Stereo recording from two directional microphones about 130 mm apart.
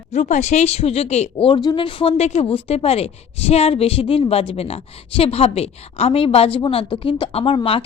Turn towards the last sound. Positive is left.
turn(degrees=45)  # may be behind; listen again after turning